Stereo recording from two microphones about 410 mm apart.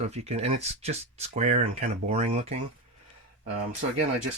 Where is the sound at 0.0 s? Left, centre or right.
Centre.